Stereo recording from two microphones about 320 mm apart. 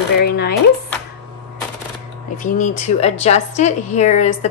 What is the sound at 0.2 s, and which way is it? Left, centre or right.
Speech, left.